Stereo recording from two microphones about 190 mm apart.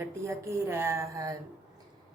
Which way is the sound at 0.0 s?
15° right (ahead or behind).